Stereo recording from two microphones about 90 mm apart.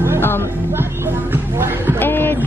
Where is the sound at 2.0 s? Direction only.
25° left (ahead or behind).